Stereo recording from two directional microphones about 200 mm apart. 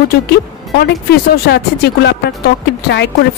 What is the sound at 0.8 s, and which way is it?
Speech, 55° left (ahead or behind).